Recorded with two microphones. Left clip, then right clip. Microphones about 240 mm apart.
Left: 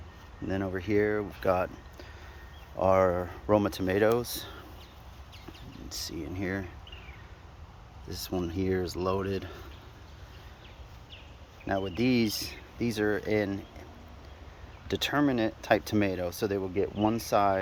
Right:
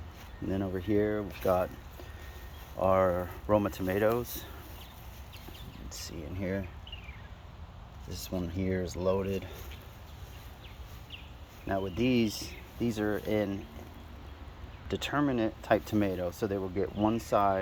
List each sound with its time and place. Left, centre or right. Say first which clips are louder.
0.4 s speech: left 1 dB; centre
1.1 s speech: left 1 dB; left
2.7 s speech: left 2 dB; left
6.3 s speech: even; centre
8.5 s speech: left 3 dB; centre
11.6 s speech: left 2 dB; left
11.9 s speech: left 1 dB; centre
14.8 s speech: left 4 dB; centre
15.1 s speech: left 2 dB; left
15.6 s speech: left 2 dB; centre
16.6 s speech: left 2 dB; left
17.2 s speech: left 2 dB; centre